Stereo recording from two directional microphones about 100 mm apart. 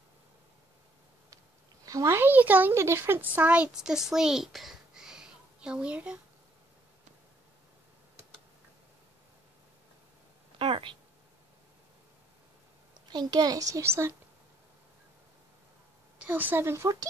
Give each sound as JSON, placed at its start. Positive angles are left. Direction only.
{"t": 1.9, "sound": "a child's voice", "side_deg": -35}
{"t": 2.1, "sound": "speech", "side_deg": -20}
{"t": 10.6, "sound": "speech", "side_deg": -60}
{"t": 12.9, "sound": "a woman's voice", "side_deg": -45}
{"t": 16.2, "sound": "speech", "side_deg": -15}